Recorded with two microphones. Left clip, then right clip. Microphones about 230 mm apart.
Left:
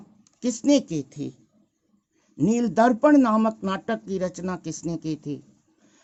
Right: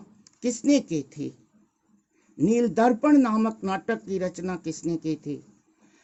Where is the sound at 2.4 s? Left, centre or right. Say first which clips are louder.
Left 1 dB; left.